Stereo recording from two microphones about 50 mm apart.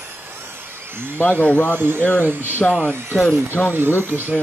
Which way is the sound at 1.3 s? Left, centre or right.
Left.